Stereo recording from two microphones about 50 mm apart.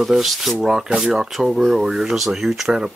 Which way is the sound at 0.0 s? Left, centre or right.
Centre.